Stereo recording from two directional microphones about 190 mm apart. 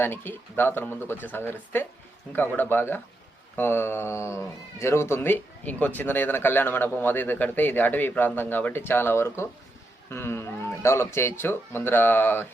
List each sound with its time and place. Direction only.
0.0 s speech: 10° left (ahead or behind)